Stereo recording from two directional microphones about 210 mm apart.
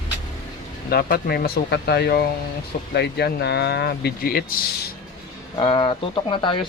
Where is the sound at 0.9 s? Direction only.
45° left (ahead or behind).